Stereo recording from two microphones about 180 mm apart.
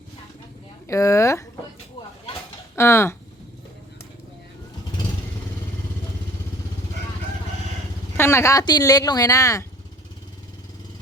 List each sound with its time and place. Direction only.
0.9 s speech: 15° left (ahead or behind)
2.7 s speech: 15° left (ahead or behind)
8.1 s speech: 15° left (ahead or behind)